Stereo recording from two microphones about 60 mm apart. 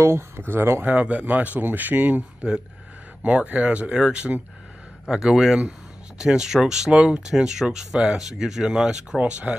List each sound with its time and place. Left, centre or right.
0.0 s speech: right
0.9 s speech: right
3.3 s speech: right
5.0 s speech: centre
9.2 s speech: right